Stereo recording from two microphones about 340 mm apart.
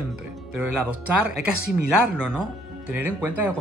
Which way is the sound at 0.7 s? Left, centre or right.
Left.